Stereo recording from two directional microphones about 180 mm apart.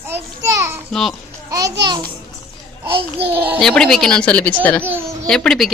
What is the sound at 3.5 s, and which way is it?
A woman's voice, 5° left (ahead or behind).